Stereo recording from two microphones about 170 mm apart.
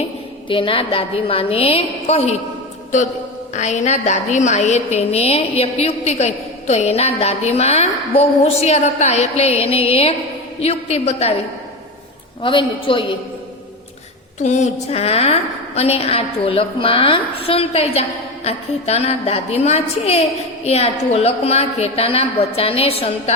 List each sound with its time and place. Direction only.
0.4 s a woman's voice: 30° left (ahead or behind)
3.5 s a woman's voice: 45° left (ahead or behind)
12.4 s a woman's voice: 30° left (ahead or behind)
14.4 s a woman's voice: 45° left (ahead or behind)